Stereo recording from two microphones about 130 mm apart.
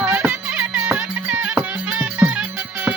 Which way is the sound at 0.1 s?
15° right (ahead or behind).